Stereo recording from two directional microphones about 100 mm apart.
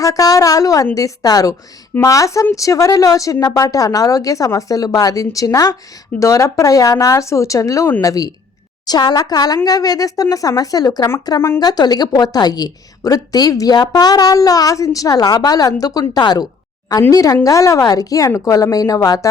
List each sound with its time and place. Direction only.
0.0 s a woman's voice: 35° left (ahead or behind)
11.3 s speech: 25° left (ahead or behind)
11.6 s a woman's voice: 40° left (ahead or behind)